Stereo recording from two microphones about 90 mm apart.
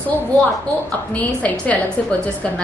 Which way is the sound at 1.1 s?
15° left (ahead or behind).